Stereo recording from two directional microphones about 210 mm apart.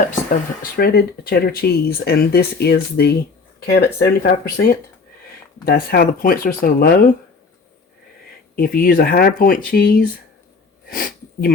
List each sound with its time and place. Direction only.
0.8 s speech: 50° left (ahead or behind)
8.5 s speech: 45° left (ahead or behind)
10.8 s a sound: 45° left (ahead or behind)